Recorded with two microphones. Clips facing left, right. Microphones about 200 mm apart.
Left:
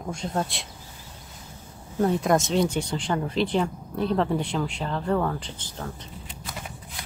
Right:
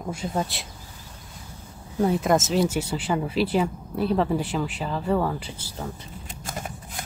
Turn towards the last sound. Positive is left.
turn(degrees=-45)  # may be behind; listen again after turning